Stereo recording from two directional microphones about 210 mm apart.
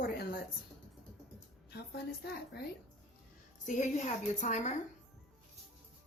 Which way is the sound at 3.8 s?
35° left (ahead or behind).